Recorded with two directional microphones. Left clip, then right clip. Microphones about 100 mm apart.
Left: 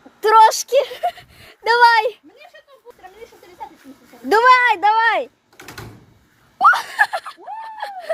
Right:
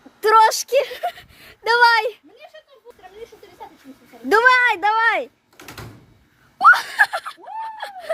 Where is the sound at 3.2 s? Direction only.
15° right (ahead or behind).